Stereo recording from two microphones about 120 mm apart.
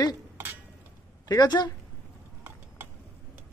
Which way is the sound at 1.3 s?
35° left (ahead or behind).